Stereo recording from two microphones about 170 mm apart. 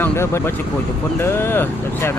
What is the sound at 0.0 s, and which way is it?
Speech, 15° left (ahead or behind).